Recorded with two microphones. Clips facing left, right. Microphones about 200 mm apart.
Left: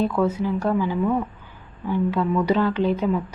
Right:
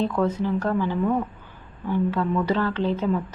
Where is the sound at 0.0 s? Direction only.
10° left (ahead or behind).